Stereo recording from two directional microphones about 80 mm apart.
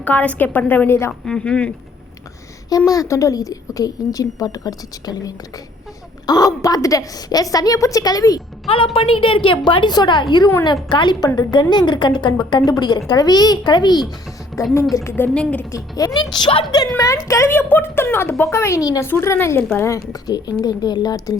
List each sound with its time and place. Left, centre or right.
0.0 s speech: centre
1.2 s speech: centre
2.6 s a woman's voice: left
8.7 s a woman's voice: left
14.5 s a sound: centre
15.4 s speech: centre
15.7 s a woman's voice: left
16.1 s a woman's voice: left
17.0 s a woman's voice: left
19.0 s a woman's voice: left
20.6 s a woman's voice: left